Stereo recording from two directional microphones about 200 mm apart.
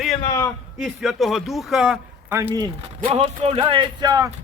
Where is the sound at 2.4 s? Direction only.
15° right (ahead or behind).